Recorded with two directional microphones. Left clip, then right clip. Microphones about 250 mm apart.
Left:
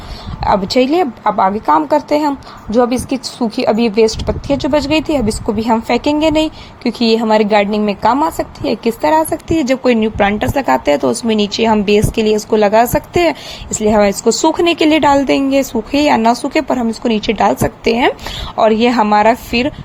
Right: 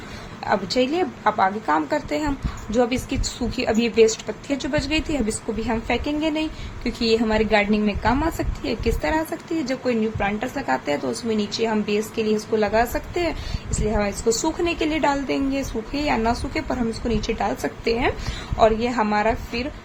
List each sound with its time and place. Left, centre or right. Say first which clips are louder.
0.4 s a woman's voice: left 9 dB; left